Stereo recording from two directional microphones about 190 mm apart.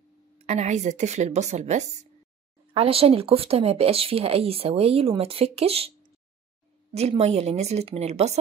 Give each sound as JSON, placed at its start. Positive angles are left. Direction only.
{"t": 0.5, "sound": "speech", "side_deg": -35}